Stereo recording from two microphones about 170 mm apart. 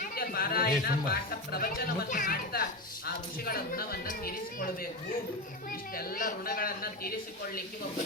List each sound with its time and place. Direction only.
0.2 s speech: 60° left (ahead or behind)
6.0 s speech: 55° left (ahead or behind)